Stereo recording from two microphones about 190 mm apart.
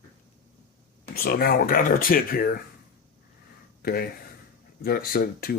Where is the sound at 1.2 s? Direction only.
50° left (ahead or behind).